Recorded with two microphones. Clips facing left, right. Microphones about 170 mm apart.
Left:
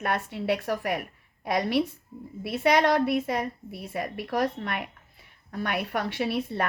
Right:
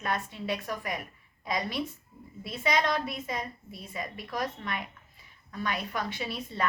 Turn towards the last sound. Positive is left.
turn(degrees=60)  # may be behind; listen again after turning